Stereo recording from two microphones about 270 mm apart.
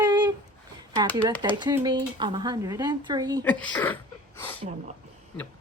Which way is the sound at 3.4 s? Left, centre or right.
Centre.